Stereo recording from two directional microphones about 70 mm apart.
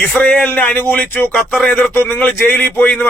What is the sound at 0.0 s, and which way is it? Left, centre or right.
A man's voice, left.